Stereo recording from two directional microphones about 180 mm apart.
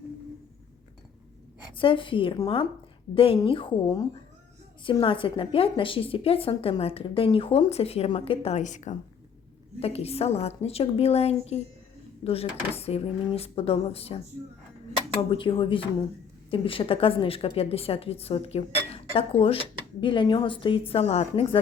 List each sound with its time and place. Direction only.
1.7 s a woman's voice: 30° left (ahead or behind)
15.3 s a woman's voice: 30° left (ahead or behind)